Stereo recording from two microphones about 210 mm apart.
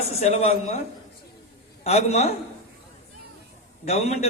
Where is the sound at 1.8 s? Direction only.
30° left (ahead or behind).